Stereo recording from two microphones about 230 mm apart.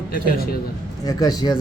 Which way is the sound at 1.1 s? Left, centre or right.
Centre.